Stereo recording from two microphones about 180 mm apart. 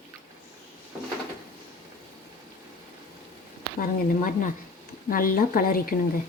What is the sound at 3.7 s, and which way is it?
A woman's voice, 50° left (ahead or behind).